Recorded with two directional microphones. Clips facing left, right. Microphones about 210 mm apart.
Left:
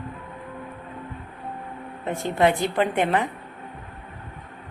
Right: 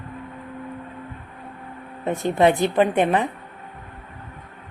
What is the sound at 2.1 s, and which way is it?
Speech, 20° right (ahead or behind).